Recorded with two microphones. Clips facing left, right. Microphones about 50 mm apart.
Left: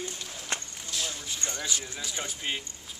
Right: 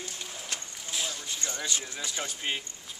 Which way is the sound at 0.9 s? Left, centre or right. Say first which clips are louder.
Even; centre.